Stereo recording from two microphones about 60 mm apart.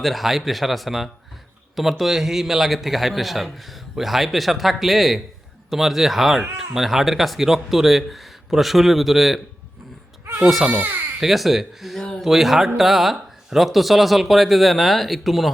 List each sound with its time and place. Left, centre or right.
0.0 s a man's voice: centre
10.2 s baby cry: right
11.2 s a man's voice: centre
11.9 s a sound: centre
12.2 s a man's voice: centre